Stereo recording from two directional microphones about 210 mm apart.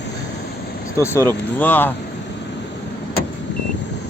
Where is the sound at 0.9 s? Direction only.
10° left (ahead or behind).